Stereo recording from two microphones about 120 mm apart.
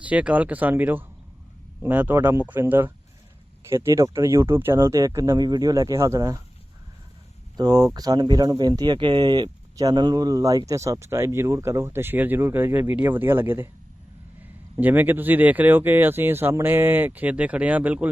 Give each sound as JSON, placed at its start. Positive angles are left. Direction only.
{"t": 0.0, "sound": "speech", "side_deg": -10}
{"t": 7.5, "sound": "speech", "side_deg": -35}
{"t": 14.8, "sound": "speech", "side_deg": -15}